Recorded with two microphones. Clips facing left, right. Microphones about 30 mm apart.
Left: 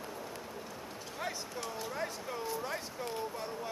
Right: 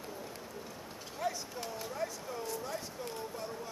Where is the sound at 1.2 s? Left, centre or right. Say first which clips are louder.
Right 4 dB; left.